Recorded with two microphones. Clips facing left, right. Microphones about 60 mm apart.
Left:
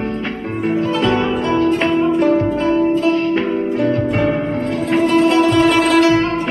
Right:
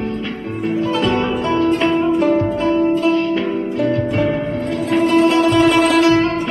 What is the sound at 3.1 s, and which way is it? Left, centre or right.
Music, left.